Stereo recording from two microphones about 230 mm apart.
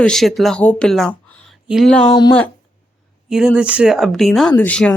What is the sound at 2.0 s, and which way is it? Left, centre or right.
Speech, centre.